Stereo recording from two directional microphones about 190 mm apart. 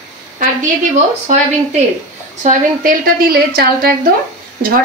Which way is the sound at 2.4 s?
45° right (ahead or behind).